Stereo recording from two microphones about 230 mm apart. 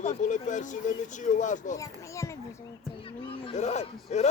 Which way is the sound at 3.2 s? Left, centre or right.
Left.